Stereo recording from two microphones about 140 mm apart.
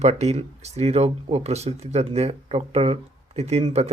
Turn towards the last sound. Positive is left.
turn(degrees=-50)  # may be behind; listen again after turning